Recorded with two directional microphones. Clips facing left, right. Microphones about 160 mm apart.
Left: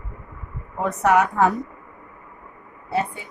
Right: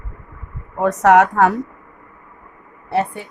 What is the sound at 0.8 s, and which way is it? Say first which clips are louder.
Speech: right 6 dB; 85° right.